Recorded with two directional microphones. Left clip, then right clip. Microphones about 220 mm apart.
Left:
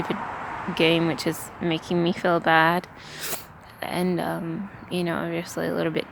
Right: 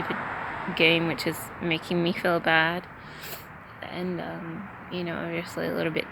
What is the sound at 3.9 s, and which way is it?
Speech, 30° left (ahead or behind).